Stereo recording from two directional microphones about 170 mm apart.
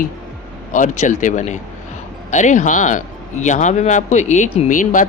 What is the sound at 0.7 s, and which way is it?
Speech, 45° left (ahead or behind).